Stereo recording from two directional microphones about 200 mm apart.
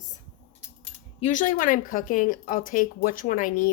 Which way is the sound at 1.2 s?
40° left (ahead or behind).